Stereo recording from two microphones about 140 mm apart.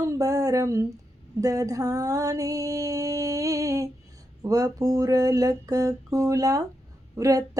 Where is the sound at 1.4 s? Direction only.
25° right (ahead or behind).